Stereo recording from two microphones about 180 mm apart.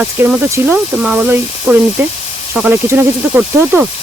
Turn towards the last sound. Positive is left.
turn(degrees=-10)  # may be behind; listen again after turning